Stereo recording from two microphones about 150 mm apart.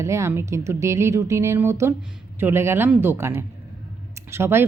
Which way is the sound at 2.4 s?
15° right (ahead or behind).